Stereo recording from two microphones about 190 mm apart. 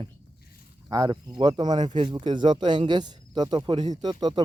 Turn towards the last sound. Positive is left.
turn(degrees=-20)  # may be behind; listen again after turning